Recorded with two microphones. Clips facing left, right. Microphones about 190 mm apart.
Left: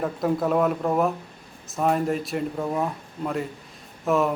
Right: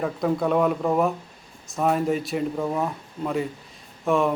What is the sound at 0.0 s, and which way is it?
A man's voice, centre (ahead or behind).